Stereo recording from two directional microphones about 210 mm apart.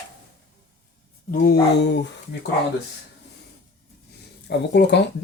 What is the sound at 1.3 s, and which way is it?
Speech, 45° left (ahead or behind).